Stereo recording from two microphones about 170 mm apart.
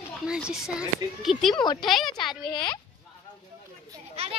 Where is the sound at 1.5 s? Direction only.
25° left (ahead or behind).